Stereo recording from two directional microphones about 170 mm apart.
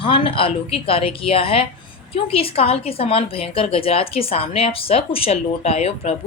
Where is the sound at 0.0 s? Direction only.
30° left (ahead or behind).